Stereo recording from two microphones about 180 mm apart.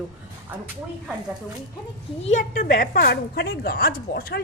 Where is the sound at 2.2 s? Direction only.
40° left (ahead or behind).